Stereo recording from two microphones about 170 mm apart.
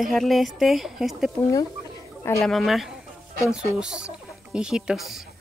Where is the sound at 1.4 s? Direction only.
20° left (ahead or behind).